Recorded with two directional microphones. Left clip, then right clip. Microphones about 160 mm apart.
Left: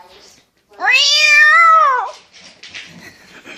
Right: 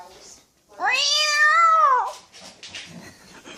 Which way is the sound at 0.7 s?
15° left (ahead or behind).